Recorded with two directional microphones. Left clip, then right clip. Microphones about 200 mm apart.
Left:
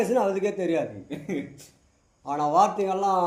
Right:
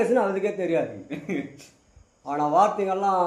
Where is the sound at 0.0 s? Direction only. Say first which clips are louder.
Right 1 dB; 35° left (ahead or behind).